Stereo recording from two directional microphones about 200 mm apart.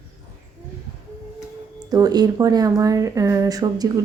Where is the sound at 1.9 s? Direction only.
20° right (ahead or behind).